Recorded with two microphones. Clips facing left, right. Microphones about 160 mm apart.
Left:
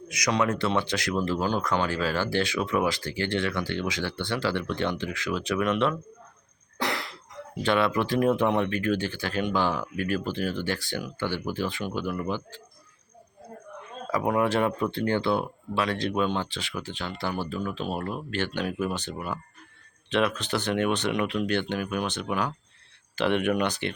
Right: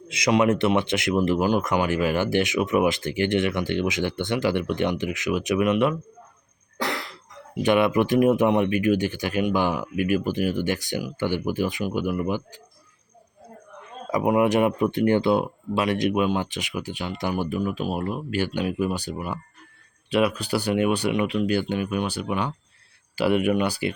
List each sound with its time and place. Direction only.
0.1 s speech: 25° right (ahead or behind)
7.6 s speech: 15° right (ahead or behind)
14.1 s speech: 15° right (ahead or behind)